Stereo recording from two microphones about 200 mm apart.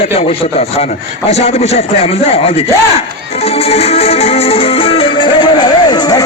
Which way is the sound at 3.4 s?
30° left (ahead or behind).